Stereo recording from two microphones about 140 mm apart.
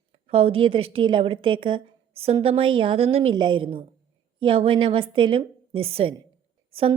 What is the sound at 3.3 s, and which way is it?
A woman's voice, 35° right (ahead or behind).